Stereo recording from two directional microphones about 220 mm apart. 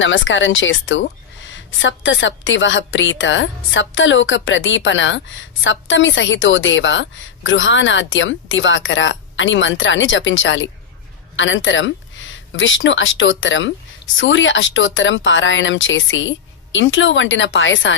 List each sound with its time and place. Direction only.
0.0 s a woman's voice: 60° left (ahead or behind)